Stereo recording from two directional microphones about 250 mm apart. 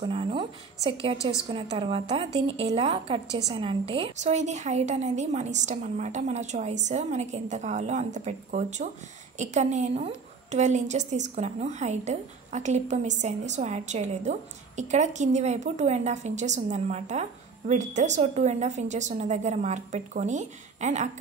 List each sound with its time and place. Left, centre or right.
0.0 s a woman's voice: right